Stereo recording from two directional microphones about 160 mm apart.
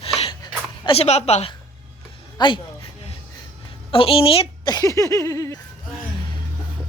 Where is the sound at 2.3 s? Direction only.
30° left (ahead or behind).